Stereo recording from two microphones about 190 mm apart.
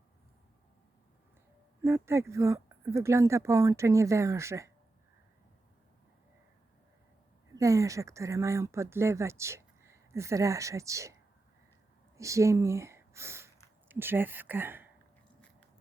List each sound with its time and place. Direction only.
1.8 s speech: 15° right (ahead or behind)
7.5 s speech: 15° right (ahead or behind)